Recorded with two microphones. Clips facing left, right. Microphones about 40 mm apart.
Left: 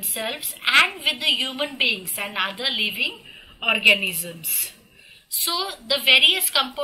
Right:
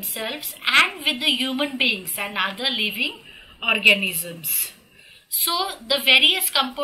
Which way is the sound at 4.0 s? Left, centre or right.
Centre.